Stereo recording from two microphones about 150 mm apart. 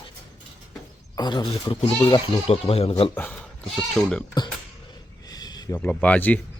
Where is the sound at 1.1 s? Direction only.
30° left (ahead or behind).